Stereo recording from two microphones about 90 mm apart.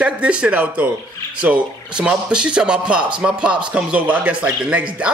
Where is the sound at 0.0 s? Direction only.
15° right (ahead or behind).